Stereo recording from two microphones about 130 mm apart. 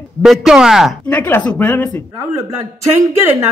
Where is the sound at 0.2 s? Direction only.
5° right (ahead or behind).